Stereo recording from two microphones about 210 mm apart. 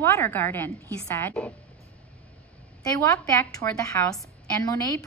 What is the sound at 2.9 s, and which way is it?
A woman's voice, 15° left (ahead or behind).